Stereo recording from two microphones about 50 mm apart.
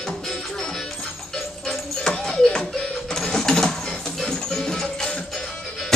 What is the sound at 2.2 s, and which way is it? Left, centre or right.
Music, centre.